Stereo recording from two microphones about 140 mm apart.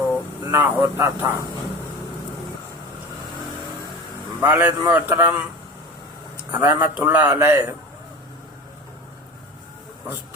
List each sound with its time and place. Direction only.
0.4 s a man's voice: 20° right (ahead or behind)
4.4 s a man's voice: 20° right (ahead or behind)
6.5 s a man's voice: 20° right (ahead or behind)